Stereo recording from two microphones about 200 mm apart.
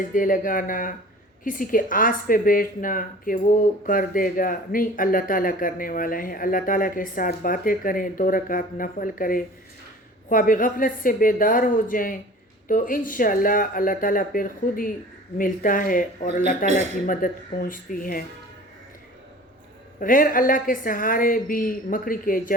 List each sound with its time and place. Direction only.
0.1 s speech: 45° left (ahead or behind)
20.0 s speech: 45° left (ahead or behind)